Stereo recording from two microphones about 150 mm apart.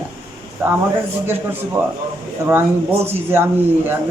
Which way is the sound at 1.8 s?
10° right (ahead or behind).